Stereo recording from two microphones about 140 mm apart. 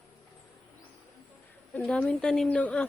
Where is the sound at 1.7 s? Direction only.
10° left (ahead or behind).